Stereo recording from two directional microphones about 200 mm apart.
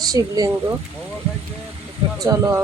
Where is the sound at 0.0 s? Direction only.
20° right (ahead or behind).